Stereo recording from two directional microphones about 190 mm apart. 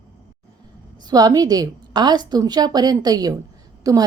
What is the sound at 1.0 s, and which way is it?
A woman's voice, 20° right (ahead or behind).